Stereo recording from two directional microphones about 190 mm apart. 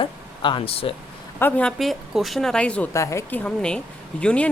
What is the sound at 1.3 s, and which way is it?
A woman's voice, 10° left (ahead or behind).